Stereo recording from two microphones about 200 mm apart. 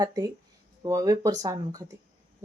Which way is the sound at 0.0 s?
20° right (ahead or behind).